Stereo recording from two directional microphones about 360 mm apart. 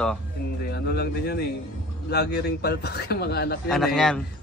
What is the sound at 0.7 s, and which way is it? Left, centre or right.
Speech, left.